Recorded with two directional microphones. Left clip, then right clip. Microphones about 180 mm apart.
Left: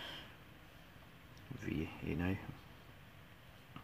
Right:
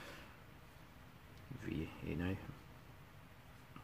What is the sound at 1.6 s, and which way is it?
Speech, 20° left (ahead or behind).